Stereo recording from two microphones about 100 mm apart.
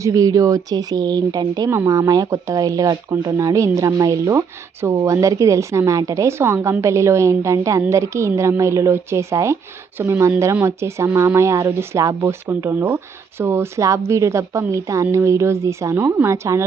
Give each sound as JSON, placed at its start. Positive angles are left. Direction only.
{"t": 0.0, "sound": "speech", "side_deg": -35}